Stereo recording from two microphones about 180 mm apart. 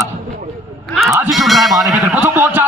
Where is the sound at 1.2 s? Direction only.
Centre (ahead or behind).